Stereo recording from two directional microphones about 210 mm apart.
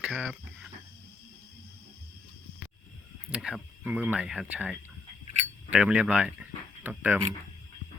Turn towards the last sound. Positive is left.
turn(degrees=-10)  # may be behind; listen again after turning